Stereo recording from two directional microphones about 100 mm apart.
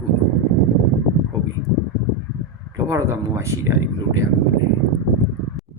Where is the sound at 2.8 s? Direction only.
30° right (ahead or behind).